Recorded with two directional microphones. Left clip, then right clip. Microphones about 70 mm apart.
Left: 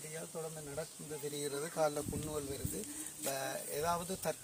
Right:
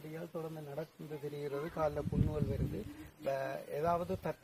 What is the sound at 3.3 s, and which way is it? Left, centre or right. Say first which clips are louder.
Speech: right 2 dB; right.